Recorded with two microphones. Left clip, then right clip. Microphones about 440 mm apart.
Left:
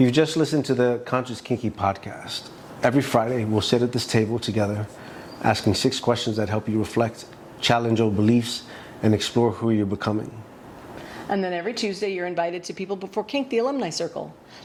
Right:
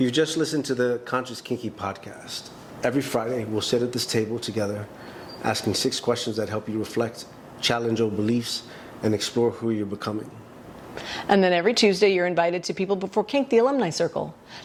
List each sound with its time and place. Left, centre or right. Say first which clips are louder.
0.0 s a man's voice: left 3 dB; left
11.3 s a woman's voice: right 6 dB; right